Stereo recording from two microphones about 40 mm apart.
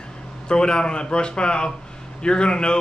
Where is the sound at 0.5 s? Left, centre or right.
Left.